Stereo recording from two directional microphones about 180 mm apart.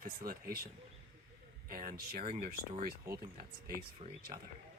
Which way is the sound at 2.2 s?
30° right (ahead or behind).